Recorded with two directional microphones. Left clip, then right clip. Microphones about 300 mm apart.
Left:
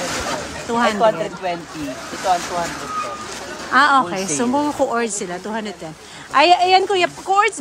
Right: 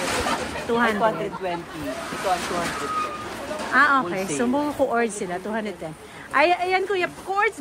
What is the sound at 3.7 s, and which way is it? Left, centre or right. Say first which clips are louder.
Speech: left 5 dB; centre.